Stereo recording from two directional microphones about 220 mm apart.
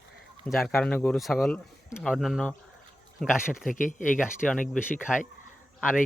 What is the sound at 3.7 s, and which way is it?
Speech, 35° left (ahead or behind).